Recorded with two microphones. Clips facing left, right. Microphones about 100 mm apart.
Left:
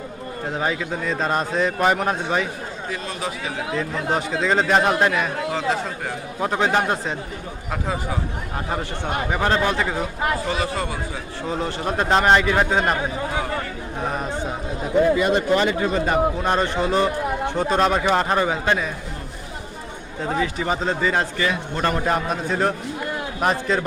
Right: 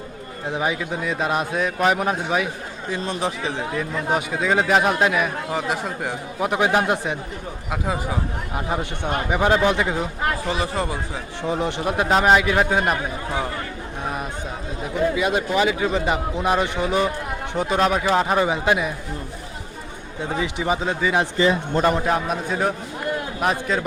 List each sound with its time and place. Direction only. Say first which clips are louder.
0.5 s a man's voice: right 1 dB; 15° right (ahead or behind)
2.9 s speech: right 5 dB; 25° right (ahead or behind)
3.8 s a man's voice: left 1 dB; 5° right (ahead or behind)
8.5 s a man's voice: right 1 dB; 15° right (ahead or behind)
15.1 s a man's voice: left 3 dB; 5° right (ahead or behind)
17.7 s a man's voice: right 1 dB; centre (ahead or behind)
18.4 s a man's voice: right 1 dB; 15° right (ahead or behind)
20.4 s a man's voice: right 1 dB; 15° right (ahead or behind)
21.3 s speech: right 5 dB; 25° right (ahead or behind)
22.0 s a man's voice: even; 5° right (ahead or behind)